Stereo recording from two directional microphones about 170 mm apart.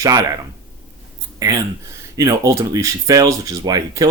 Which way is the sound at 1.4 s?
20° right (ahead or behind).